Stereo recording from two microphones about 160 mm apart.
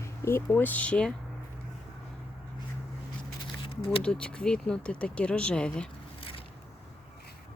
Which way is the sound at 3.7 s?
35° left (ahead or behind).